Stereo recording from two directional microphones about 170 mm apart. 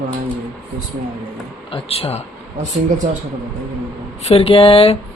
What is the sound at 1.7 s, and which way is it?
Speech, 35° left (ahead or behind).